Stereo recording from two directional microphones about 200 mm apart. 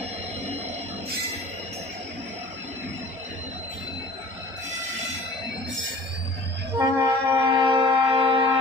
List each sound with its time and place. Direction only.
6.8 s wind instrument: 20° right (ahead or behind)